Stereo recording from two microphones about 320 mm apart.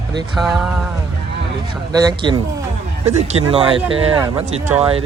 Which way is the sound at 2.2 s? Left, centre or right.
Centre.